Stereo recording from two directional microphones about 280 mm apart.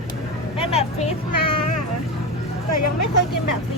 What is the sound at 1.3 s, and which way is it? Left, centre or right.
Music, left.